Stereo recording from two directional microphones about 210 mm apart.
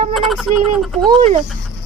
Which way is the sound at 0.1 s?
Centre (ahead or behind).